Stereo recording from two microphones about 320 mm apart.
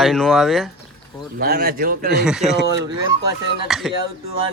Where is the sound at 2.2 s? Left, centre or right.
Centre.